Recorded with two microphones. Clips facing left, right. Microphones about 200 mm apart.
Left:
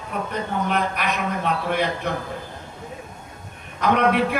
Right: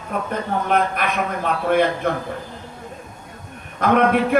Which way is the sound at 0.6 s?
50° right (ahead or behind).